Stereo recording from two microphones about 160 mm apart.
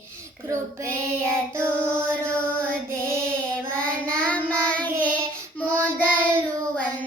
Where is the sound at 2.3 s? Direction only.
5° left (ahead or behind).